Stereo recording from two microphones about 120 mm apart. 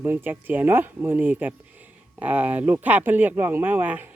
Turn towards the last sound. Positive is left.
turn(degrees=-15)  # may be behind; listen again after turning